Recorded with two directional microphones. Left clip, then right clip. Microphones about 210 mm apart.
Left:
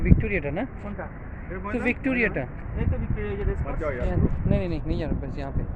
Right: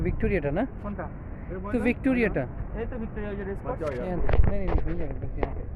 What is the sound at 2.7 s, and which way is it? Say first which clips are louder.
Speech: left 1 dB; 55° right (ahead or behind).